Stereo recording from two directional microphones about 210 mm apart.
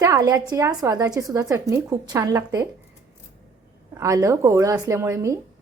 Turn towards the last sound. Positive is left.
turn(degrees=-15)  # may be behind; listen again after turning